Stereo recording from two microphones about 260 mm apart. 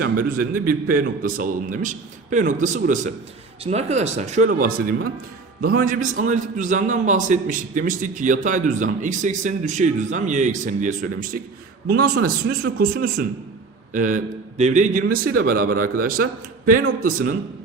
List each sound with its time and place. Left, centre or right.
0.0 s a man's voice: right